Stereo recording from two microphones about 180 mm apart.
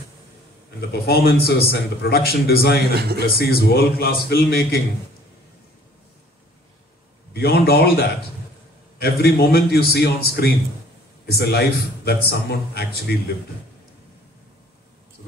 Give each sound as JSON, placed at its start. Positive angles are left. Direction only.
{"t": 0.7, "sound": "a man's voice", "side_deg": 60}
{"t": 2.9, "sound": "a man's voice", "side_deg": -65}
{"t": 3.2, "sound": "a man's voice", "side_deg": 60}
{"t": 7.3, "sound": "a man's voice", "side_deg": 60}